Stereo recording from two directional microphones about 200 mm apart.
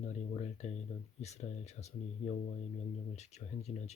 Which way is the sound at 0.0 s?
35° left (ahead or behind).